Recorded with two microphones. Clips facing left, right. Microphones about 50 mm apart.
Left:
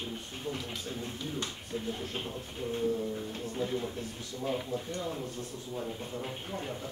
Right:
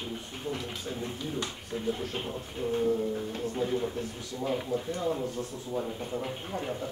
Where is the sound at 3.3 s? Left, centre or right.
Right.